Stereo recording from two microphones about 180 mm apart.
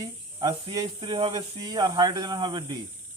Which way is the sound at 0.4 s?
20° right (ahead or behind).